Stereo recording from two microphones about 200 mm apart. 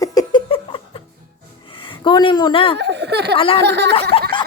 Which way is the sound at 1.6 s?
25° left (ahead or behind).